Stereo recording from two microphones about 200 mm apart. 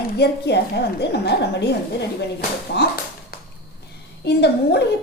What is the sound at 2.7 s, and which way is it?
Speech, 55° left (ahead or behind).